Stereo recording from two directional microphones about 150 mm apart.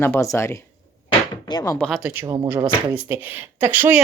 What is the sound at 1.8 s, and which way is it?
Speech, centre (ahead or behind).